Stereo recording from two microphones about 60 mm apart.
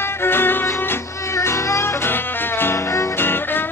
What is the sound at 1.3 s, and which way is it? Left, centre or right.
Music, left.